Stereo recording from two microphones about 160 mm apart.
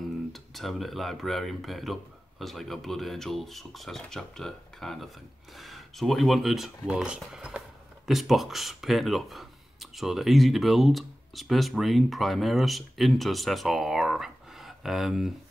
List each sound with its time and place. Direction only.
0.3 s speech: centre (ahead or behind)